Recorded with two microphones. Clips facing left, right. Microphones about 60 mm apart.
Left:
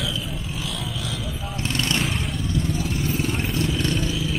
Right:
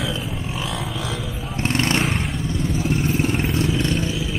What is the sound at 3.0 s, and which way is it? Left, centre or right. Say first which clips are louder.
Vehicle: right 4 dB; right.